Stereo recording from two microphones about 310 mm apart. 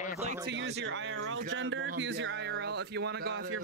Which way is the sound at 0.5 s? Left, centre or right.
Right.